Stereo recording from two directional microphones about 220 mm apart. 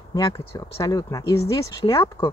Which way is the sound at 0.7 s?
15° left (ahead or behind).